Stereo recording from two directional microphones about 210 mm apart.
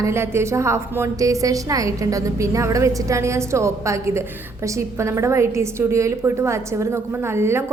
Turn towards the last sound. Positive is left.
turn(degrees=-10)  # may be behind; listen again after turning